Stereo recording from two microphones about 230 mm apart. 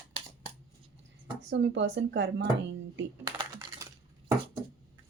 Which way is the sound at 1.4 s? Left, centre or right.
Right.